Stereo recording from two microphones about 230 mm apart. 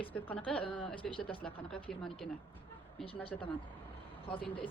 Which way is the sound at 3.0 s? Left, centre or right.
Left.